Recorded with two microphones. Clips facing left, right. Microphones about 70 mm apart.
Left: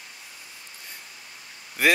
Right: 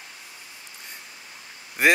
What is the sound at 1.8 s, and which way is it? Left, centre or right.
Speech, right.